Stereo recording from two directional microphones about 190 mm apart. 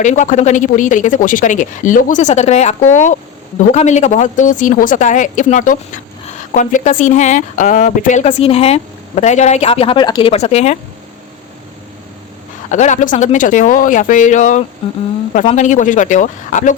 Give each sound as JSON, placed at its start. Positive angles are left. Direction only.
{"t": 0.0, "sound": "speech", "side_deg": 40}
{"t": 12.7, "sound": "speech", "side_deg": 40}